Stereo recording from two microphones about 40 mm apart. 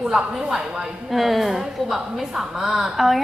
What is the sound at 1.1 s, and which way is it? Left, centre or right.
A woman's voice, centre.